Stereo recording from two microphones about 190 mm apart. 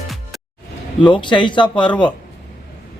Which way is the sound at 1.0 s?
25° left (ahead or behind).